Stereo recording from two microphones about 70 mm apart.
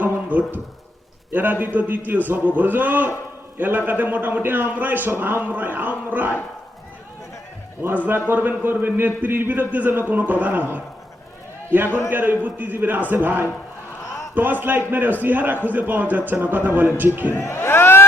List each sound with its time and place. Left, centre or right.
0.0 s a sound: right
1.3 s a man's voice: right
8.3 s a man's voice: right
17.3 s speech: left